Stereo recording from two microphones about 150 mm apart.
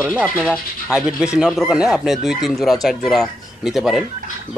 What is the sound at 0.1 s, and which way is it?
Speech, 5° right (ahead or behind).